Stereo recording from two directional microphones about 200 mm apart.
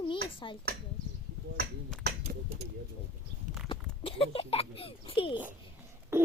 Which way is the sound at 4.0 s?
30° left (ahead or behind).